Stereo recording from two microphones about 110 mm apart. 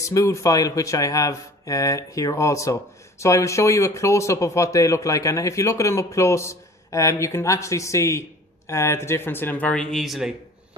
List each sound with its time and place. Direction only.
0.0 s speech: 30° left (ahead or behind); by 10.3 s centre (ahead or behind)